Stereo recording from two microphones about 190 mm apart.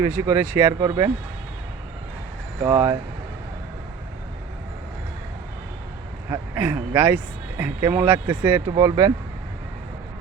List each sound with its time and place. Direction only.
0.2 s speech: 15° right (ahead or behind)
2.6 s speech: 20° right (ahead or behind)
6.3 s speech: 10° right (ahead or behind)
8.7 s speech: 20° right (ahead or behind)